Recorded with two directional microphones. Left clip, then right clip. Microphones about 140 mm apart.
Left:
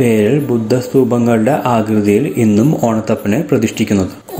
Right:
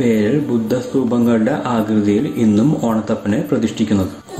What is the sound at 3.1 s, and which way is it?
Speech, 30° left (ahead or behind).